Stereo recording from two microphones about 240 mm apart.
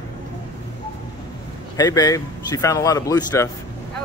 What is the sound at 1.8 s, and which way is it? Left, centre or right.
Speech, centre.